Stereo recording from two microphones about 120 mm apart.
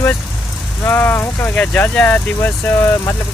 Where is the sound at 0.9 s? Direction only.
15° left (ahead or behind).